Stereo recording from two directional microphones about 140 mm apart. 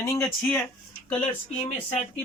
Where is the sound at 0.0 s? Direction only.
20° left (ahead or behind).